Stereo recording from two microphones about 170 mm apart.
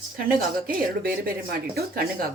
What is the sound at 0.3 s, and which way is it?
A woman's voice, 60° right (ahead or behind).